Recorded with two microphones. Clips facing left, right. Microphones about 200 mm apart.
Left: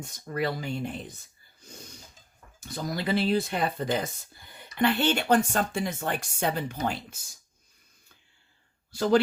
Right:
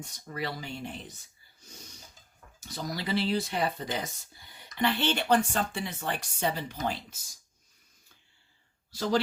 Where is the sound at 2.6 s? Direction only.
50° left (ahead or behind).